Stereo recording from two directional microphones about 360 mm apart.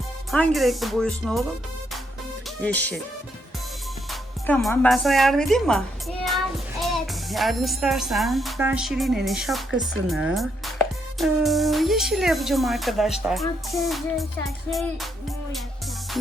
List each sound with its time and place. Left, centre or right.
0.3 s speech: centre
2.6 s speech: centre
4.1 s a child's voice: centre